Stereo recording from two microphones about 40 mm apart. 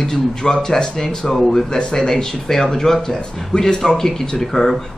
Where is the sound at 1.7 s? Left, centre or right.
Left.